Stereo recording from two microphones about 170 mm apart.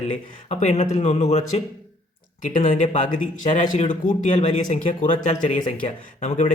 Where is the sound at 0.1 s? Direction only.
45° left (ahead or behind).